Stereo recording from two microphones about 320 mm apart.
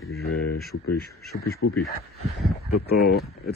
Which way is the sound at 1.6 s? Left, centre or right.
Left.